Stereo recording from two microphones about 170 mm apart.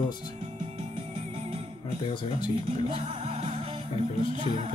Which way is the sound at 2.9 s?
35° right (ahead or behind).